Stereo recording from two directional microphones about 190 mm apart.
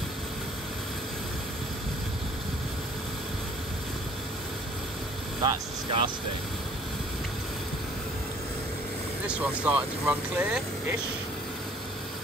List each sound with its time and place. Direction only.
5.4 s speech: 30° right (ahead or behind)
9.3 s speech: 5° right (ahead or behind)